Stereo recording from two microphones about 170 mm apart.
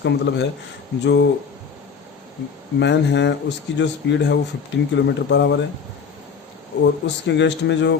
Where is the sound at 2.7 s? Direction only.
90° left.